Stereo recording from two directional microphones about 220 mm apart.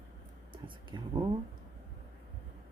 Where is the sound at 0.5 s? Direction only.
20° right (ahead or behind).